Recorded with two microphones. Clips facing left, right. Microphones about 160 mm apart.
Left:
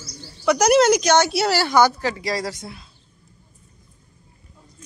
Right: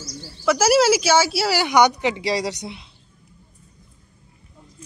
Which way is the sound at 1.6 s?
15° right (ahead or behind).